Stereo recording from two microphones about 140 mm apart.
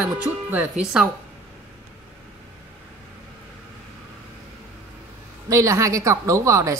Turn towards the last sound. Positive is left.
turn(degrees=-20)  # may be behind; listen again after turning